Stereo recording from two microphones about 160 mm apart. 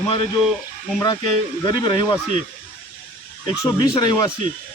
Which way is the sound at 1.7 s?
30° left (ahead or behind).